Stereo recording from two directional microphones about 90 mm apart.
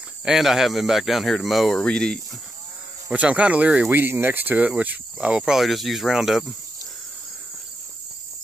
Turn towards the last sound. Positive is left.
turn(degrees=-5)  # may be behind; listen again after turning